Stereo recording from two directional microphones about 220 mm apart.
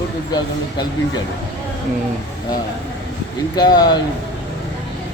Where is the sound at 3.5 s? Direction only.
20° left (ahead or behind).